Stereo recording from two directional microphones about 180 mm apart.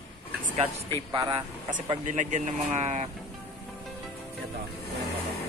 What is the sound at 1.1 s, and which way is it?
Speech, 20° right (ahead or behind).